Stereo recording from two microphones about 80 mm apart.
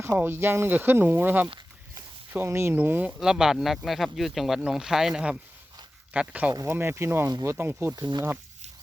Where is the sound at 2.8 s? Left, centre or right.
Right.